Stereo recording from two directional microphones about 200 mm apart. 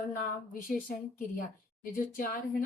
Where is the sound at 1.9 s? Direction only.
45° left (ahead or behind).